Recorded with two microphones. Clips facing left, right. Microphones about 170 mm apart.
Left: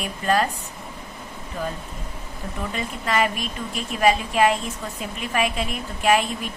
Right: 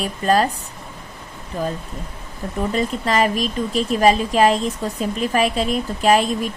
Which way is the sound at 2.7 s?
35° right (ahead or behind).